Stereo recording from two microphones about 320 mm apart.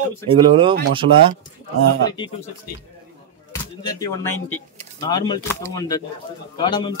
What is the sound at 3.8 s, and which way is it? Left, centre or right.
Speech, centre.